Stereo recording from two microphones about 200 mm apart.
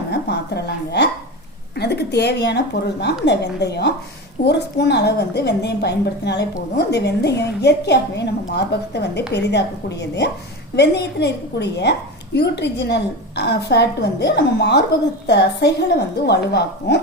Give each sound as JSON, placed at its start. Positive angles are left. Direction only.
{"t": 0.1, "sound": "a woman's voice", "side_deg": 55}